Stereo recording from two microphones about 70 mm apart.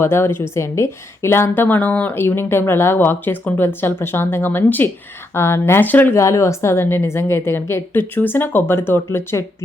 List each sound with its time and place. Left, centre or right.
0.0 s a woman's voice: left
6.1 s a woman's voice: left